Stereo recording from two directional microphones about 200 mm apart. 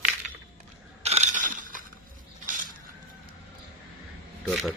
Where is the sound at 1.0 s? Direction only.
35° right (ahead or behind).